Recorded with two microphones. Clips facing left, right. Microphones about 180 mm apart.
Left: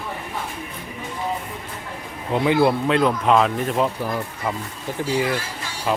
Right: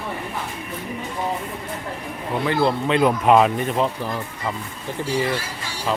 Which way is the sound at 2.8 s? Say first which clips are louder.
Even; centre (ahead or behind).